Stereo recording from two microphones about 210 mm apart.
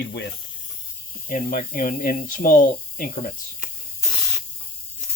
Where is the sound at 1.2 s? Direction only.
40° left (ahead or behind).